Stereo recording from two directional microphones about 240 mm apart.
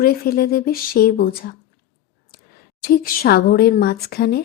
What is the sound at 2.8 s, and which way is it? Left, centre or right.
Speech, left.